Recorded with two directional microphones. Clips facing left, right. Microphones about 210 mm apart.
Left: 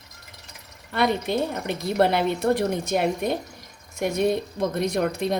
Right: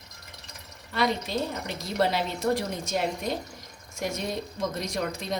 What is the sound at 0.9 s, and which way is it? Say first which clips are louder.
A woman's voice: left 4 dB; 60° left (ahead or behind).